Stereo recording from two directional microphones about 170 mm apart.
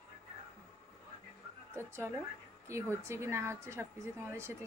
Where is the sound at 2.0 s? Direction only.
10° right (ahead or behind).